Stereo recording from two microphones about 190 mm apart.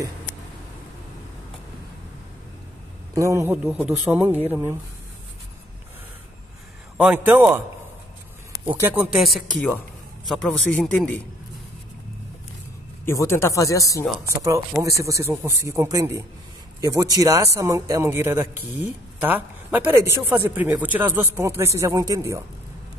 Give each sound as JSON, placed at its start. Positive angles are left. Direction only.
{"t": 3.2, "sound": "a man's voice", "side_deg": -15}
{"t": 7.0, "sound": "a man's voice", "side_deg": -5}
{"t": 8.9, "sound": "a man's voice", "side_deg": 0}
{"t": 13.0, "sound": "speech", "side_deg": 15}
{"t": 14.2, "sound": "a man's voice", "side_deg": -15}